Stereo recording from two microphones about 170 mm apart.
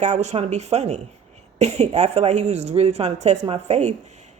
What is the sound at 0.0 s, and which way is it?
Speech, 45° right (ahead or behind).